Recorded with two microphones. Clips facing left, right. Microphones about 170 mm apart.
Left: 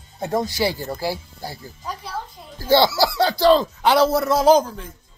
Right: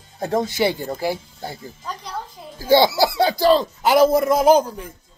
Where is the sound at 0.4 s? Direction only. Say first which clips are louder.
Right 3 dB; 20° right (ahead or behind).